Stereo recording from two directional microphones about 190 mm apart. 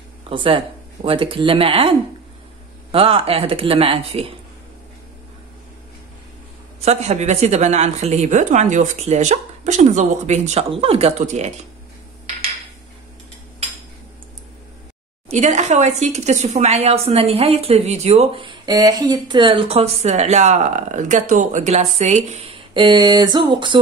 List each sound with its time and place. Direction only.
0.3 s speech: 30° right (ahead or behind)
6.8 s speech: 35° right (ahead or behind)
15.2 s speech: 40° right (ahead or behind)